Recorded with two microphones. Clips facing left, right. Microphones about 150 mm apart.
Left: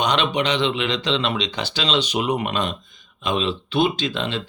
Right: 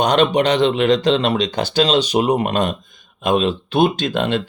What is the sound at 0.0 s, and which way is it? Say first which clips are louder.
Speech: right 6 dB; 45° right (ahead or behind).